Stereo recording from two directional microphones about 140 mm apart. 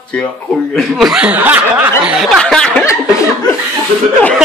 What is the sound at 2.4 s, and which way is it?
Speech, 5° left (ahead or behind).